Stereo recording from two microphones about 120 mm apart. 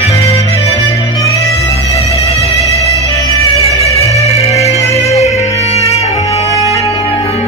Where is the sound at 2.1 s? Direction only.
60° left (ahead or behind).